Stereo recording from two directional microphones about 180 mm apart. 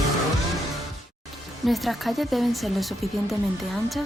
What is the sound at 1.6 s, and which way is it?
Speech, centre (ahead or behind).